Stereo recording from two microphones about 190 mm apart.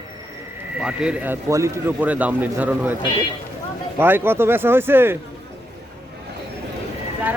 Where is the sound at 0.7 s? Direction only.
5° right (ahead or behind).